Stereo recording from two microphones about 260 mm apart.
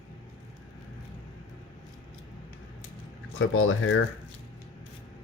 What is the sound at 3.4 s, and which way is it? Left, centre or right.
Speech, left.